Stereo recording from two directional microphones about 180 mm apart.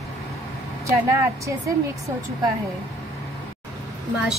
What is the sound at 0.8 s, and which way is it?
Speech, 15° right (ahead or behind).